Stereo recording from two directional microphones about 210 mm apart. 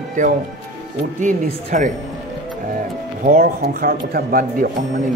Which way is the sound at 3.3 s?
45° right (ahead or behind).